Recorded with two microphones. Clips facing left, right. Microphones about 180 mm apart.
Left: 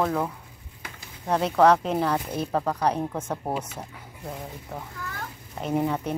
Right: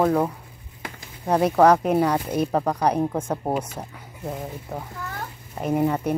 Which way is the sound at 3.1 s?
30° right (ahead or behind).